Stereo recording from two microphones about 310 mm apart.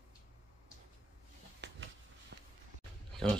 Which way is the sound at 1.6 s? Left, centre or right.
Right.